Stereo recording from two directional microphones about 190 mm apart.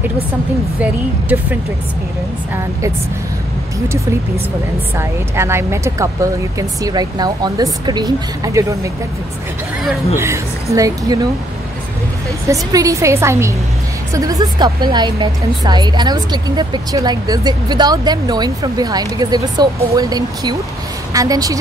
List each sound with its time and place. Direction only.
4.9 s a woman's voice: 15° right (ahead or behind)
10.1 s speech: 15° right (ahead or behind)
12.4 s a woman's voice: 15° right (ahead or behind)